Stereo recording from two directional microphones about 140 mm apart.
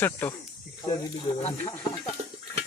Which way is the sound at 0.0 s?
15° left (ahead or behind).